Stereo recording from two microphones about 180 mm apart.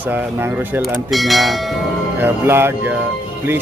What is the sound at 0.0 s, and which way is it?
Speech, 10° right (ahead or behind).